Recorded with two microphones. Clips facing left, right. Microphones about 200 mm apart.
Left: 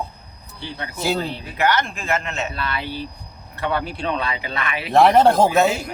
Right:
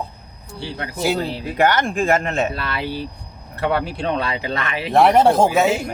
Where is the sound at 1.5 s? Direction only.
45° right (ahead or behind).